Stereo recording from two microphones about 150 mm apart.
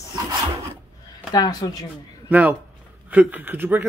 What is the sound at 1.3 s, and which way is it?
Speech, 25° left (ahead or behind).